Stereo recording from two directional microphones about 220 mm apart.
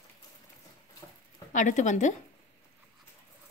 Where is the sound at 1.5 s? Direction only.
35° left (ahead or behind).